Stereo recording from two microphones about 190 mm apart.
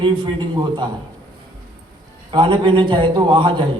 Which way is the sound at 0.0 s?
25° right (ahead or behind).